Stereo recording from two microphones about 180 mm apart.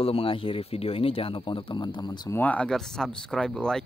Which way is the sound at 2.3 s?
10° left (ahead or behind).